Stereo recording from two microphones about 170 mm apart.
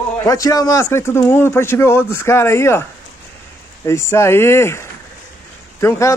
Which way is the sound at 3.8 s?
15° left (ahead or behind).